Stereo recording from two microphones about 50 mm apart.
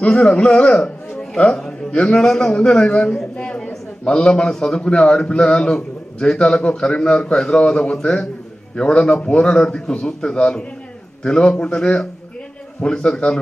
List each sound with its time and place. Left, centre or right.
0.0 s a man's voice: centre